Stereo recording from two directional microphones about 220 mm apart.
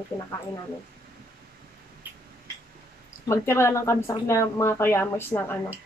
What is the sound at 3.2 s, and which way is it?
Speech, 10° left (ahead or behind).